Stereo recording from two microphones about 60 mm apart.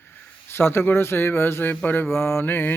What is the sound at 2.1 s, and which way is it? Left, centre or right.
Mantra, left.